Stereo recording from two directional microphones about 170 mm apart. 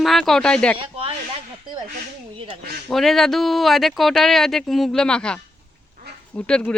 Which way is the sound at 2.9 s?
Centre (ahead or behind).